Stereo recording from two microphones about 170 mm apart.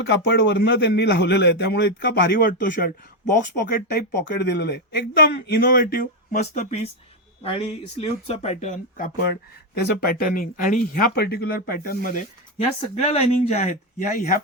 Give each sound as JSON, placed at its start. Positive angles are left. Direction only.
{"t": 0.0, "sound": "a man's voice", "side_deg": 90}
{"t": 3.6, "sound": "speech", "side_deg": 65}
{"t": 9.3, "sound": "speech", "side_deg": 70}
{"t": 12.5, "sound": "speech", "side_deg": 35}
{"t": 14.1, "sound": "speech", "side_deg": 60}